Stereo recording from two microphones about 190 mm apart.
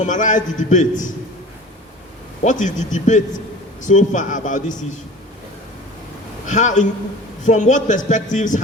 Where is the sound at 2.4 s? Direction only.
40° left (ahead or behind).